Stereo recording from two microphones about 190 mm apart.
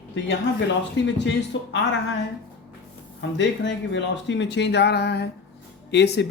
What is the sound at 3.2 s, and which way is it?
Speech, 70° left (ahead or behind).